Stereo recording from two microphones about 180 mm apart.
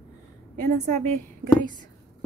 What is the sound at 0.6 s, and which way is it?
A woman's voice, 45° right (ahead or behind).